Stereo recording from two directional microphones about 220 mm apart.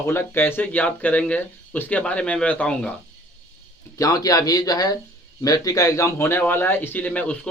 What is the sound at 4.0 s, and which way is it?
A man's voice, 15° left (ahead or behind).